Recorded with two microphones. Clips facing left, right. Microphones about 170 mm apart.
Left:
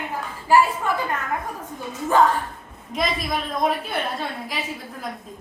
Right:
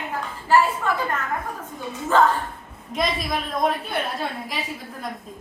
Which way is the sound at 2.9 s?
Centre (ahead or behind).